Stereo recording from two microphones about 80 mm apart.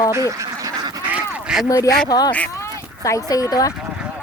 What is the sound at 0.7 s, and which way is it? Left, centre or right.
Duck, right.